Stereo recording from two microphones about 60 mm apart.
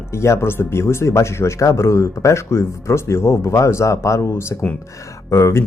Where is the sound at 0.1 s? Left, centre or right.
Left.